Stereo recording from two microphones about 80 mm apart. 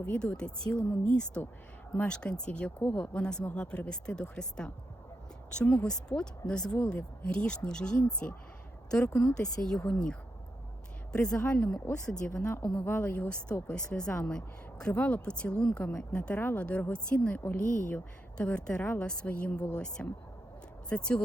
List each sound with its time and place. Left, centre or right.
0.0 s a woman's voice: centre
1.4 s a woman's voice: left
1.9 s a woman's voice: centre
3.2 s a woman's voice: centre
12.8 s a woman's voice: left
18.3 s a woman's voice: centre